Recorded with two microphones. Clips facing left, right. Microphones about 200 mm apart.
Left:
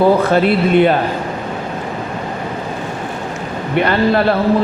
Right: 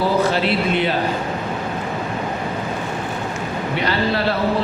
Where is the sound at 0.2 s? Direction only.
55° left (ahead or behind).